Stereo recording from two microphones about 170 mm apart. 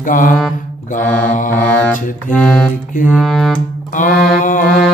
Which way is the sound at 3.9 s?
50° left (ahead or behind).